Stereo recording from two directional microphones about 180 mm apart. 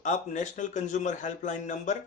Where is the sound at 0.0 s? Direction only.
45° left (ahead or behind).